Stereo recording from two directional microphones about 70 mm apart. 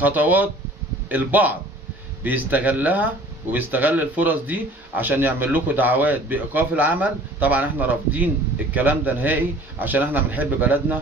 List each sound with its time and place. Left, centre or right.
0.0 s speech: right